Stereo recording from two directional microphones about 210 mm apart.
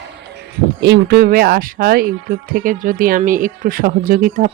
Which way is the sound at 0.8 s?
55° right (ahead or behind).